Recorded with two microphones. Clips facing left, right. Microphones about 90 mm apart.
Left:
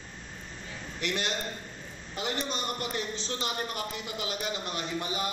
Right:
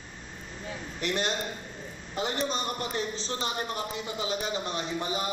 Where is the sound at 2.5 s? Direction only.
35° right (ahead or behind).